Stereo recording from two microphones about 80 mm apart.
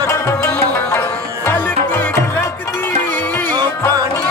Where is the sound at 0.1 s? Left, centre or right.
Left.